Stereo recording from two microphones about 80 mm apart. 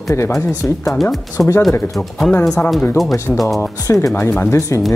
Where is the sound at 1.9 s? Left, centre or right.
Centre.